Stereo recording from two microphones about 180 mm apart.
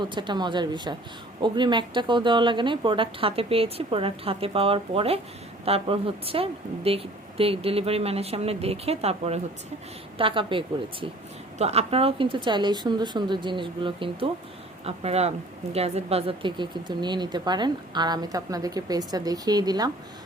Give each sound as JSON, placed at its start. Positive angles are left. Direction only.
{"t": 0.0, "sound": "a woman's voice", "side_deg": -25}